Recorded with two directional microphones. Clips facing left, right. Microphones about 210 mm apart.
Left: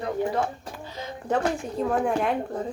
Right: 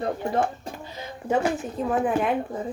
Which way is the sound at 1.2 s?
5° right (ahead or behind).